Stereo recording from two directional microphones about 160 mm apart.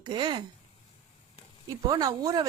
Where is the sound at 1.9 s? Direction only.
25° right (ahead or behind).